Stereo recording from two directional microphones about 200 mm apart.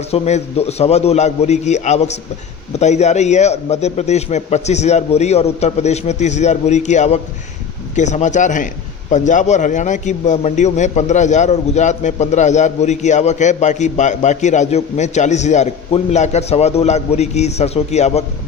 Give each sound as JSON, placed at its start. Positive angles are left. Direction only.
{"t": 0.1, "sound": "a man's voice", "side_deg": 30}